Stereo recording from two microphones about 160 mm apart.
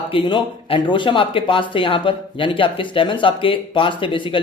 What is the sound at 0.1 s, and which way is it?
Speech, 30° left (ahead or behind).